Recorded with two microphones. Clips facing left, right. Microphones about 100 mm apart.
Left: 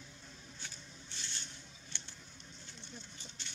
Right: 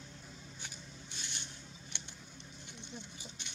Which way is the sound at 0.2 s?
10° right (ahead or behind).